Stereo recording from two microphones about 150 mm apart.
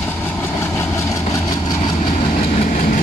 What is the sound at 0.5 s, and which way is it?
Vehicle, 20° left (ahead or behind).